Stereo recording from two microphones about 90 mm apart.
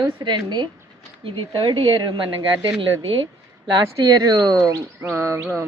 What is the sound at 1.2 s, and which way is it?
Speech, 65° right (ahead or behind).